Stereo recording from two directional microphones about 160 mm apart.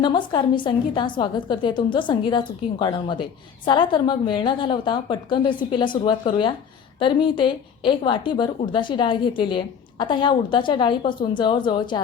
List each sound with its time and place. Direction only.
0.0 s a woman's voice: 30° left (ahead or behind)